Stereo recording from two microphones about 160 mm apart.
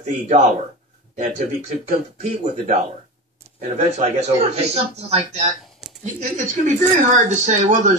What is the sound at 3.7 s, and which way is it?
Speech, 45° right (ahead or behind).